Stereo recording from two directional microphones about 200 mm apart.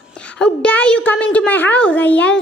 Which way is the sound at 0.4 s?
5° left (ahead or behind).